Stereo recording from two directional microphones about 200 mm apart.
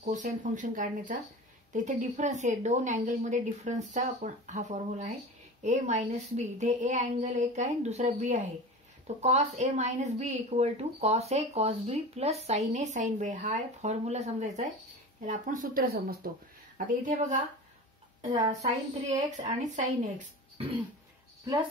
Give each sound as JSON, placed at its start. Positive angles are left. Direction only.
{"t": 0.0, "sound": "speech", "side_deg": -40}
{"t": 18.5, "sound": "speech", "side_deg": -35}